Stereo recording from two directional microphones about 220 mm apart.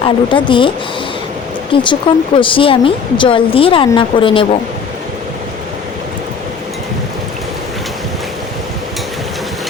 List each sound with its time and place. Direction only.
0.0 s a woman's voice: 20° left (ahead or behind)
1.7 s a woman's voice: 20° left (ahead or behind)